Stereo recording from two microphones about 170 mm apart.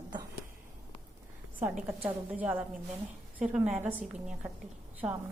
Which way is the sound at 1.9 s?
10° right (ahead or behind).